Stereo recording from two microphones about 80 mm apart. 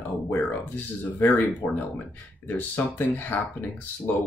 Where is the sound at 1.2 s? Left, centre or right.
Left.